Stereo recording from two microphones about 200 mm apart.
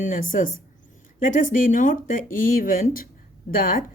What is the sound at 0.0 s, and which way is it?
Speech, 40° left (ahead or behind).